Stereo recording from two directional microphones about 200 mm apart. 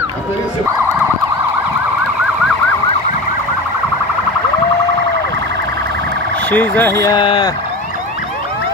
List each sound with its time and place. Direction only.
6.5 s speech: 10° left (ahead or behind); by 7.5 s 25° left (ahead or behind)